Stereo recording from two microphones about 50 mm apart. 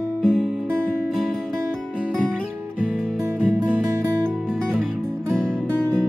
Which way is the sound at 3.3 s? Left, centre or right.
Right.